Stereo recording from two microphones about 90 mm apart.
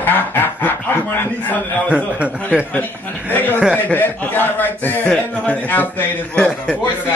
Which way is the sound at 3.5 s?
15° right (ahead or behind).